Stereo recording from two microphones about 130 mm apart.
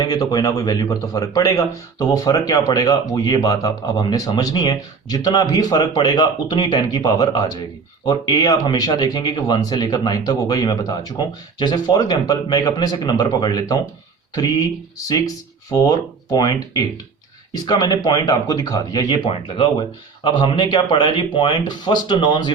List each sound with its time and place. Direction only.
0.0 s speech: 30° left (ahead or behind)
14.9 s speech: 30° left (ahead or behind)